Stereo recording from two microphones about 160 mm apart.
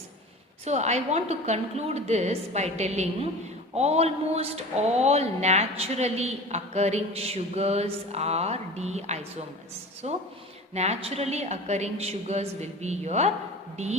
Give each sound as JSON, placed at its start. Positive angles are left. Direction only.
{"t": 0.6, "sound": "a woman's voice", "side_deg": -45}